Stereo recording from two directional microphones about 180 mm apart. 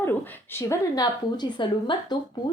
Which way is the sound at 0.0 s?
10° left (ahead or behind).